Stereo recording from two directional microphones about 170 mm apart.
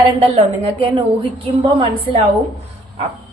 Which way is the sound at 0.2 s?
35° right (ahead or behind).